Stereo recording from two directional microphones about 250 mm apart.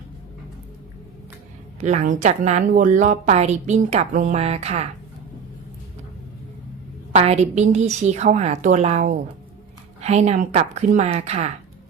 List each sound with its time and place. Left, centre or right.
1.8 s speech: right
7.1 s speech: right